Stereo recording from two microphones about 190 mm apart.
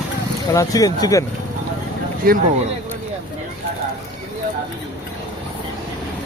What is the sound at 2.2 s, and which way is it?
Speech, 50° right (ahead or behind).